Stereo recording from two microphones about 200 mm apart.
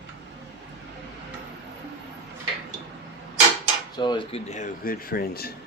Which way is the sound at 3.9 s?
20° left (ahead or behind).